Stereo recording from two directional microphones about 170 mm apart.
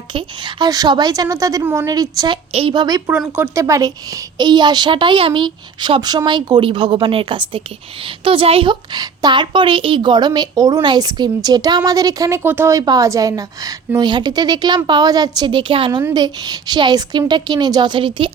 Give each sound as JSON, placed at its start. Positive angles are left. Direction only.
{"t": 0.1, "sound": "a woman's voice", "side_deg": -30}
{"t": 3.1, "sound": "a woman's voice", "side_deg": -10}